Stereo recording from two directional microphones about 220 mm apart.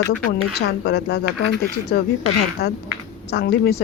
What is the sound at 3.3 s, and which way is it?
Speech, 45° left (ahead or behind).